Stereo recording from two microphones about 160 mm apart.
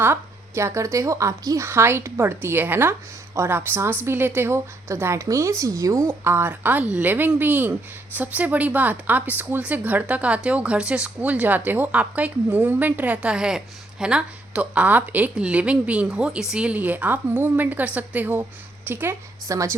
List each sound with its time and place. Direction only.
0.0 s speech: 15° right (ahead or behind)